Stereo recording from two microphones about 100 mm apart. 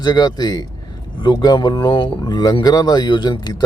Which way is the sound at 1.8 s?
60° left (ahead or behind).